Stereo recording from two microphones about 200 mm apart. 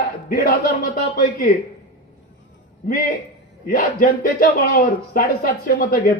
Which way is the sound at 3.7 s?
45° left (ahead or behind).